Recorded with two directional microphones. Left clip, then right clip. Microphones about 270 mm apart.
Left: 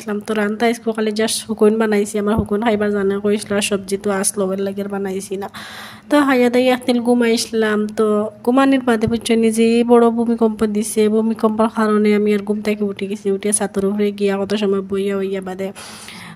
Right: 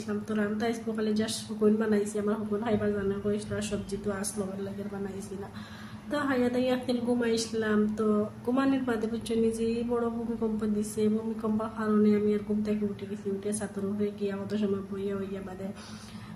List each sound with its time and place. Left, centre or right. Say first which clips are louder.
0.0 s a woman's voice: left 12 dB; left
6.0 s a woman's voice: left 15 dB; left